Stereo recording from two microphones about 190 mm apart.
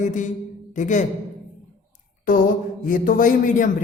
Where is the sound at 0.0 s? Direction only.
40° left (ahead or behind).